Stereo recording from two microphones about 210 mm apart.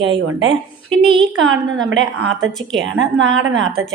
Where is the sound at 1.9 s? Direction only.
70° right (ahead or behind).